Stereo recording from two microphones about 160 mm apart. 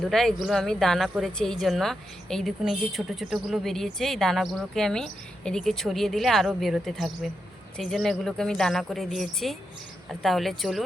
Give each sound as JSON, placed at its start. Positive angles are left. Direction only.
{"t": 0.0, "sound": "speech", "side_deg": 5}